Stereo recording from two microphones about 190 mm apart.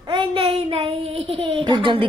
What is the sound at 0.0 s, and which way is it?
A child's voice, 25° right (ahead or behind).